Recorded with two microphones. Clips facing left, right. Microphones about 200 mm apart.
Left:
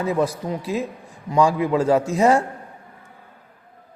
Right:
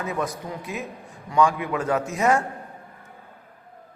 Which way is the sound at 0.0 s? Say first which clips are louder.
Left 6 dB; 30° left (ahead or behind).